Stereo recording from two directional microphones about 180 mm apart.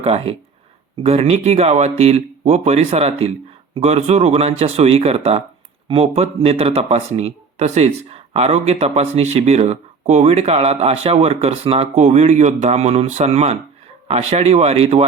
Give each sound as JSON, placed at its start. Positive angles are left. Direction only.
{"t": 0.0, "sound": "speech", "side_deg": -35}